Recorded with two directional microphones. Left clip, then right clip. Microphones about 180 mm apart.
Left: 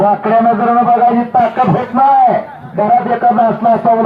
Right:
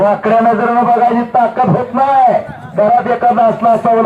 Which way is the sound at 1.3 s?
20° right (ahead or behind).